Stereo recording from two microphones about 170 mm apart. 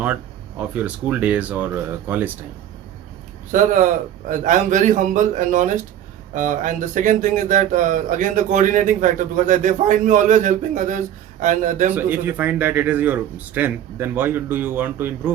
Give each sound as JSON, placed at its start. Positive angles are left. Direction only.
{"t": 0.7, "sound": "a man's voice", "side_deg": -10}
{"t": 3.5, "sound": "speech", "side_deg": -50}
{"t": 11.9, "sound": "a man's voice", "side_deg": -10}